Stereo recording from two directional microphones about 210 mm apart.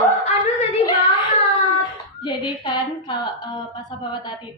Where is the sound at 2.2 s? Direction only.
20° left (ahead or behind).